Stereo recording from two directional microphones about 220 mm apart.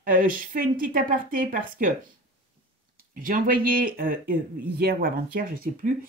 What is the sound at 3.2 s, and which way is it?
A woman's voice, 40° right (ahead or behind).